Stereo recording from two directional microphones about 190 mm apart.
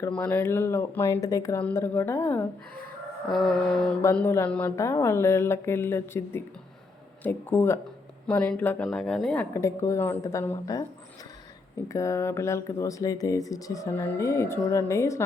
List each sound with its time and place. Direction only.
0.0 s speech: 10° left (ahead or behind)
3.2 s a sound: centre (ahead or behind)
4.0 s speech: 10° left (ahead or behind)
11.9 s speech: 15° left (ahead or behind)